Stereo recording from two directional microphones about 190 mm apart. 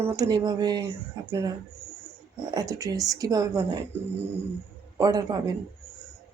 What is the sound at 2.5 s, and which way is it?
Speech, 20° right (ahead or behind).